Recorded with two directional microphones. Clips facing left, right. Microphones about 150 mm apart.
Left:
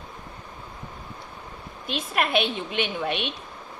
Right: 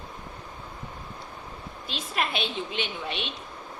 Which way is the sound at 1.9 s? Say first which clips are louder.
Left 5 dB; 60° left (ahead or behind).